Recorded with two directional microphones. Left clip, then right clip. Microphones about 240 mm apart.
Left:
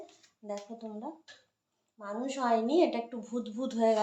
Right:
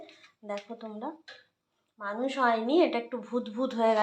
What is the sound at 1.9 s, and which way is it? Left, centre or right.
A woman's voice, centre.